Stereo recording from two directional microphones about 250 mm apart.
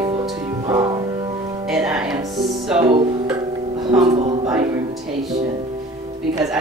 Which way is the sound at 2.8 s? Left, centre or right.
Centre.